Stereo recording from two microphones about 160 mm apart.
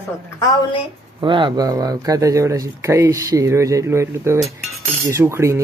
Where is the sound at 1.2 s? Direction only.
30° right (ahead or behind).